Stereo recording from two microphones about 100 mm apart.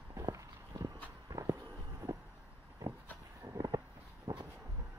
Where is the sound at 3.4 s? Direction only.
35° right (ahead or behind).